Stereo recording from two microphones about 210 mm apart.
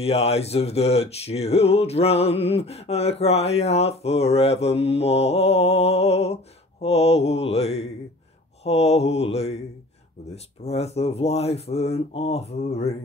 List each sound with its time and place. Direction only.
0.0 s music: 30° left (ahead or behind)